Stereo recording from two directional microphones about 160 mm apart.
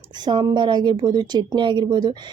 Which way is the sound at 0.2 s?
30° right (ahead or behind).